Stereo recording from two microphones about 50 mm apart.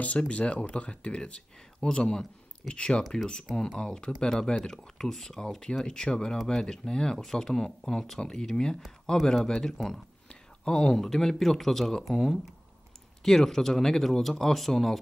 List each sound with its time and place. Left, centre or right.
0.3 s speech: left
3.0 s speech: centre